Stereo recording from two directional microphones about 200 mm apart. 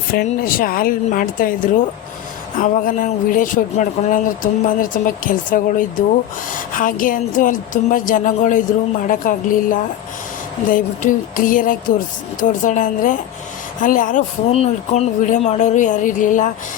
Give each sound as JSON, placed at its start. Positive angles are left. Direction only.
{"t": 0.1, "sound": "speech", "side_deg": 45}